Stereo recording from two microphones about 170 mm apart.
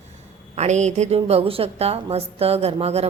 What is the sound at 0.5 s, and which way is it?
A woman's voice, 40° right (ahead or behind).